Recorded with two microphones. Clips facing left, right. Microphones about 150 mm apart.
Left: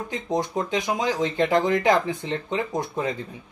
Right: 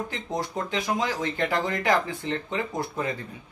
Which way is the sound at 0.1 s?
20° left (ahead or behind).